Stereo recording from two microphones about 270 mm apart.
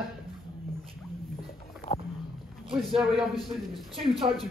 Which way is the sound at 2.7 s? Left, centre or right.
Centre.